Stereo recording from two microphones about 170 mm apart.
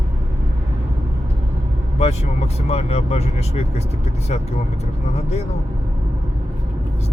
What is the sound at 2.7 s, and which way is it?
Speech, 40° left (ahead or behind).